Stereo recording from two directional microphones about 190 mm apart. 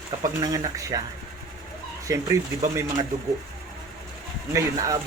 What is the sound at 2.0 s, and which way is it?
Speech, 15° right (ahead or behind).